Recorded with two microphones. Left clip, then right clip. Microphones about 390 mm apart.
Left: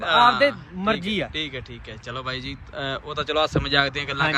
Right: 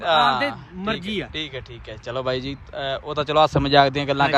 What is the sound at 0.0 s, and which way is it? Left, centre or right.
Speech, centre.